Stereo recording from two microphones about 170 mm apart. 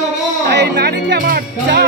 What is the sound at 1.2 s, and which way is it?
Speech, 75° right (ahead or behind).